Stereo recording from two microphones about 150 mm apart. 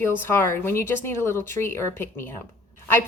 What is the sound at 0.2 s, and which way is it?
A woman's voice, 15° left (ahead or behind).